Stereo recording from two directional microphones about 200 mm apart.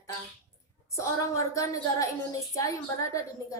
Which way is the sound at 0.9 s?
15° left (ahead or behind).